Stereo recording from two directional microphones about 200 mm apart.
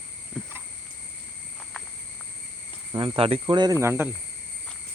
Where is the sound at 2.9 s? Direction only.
25° right (ahead or behind).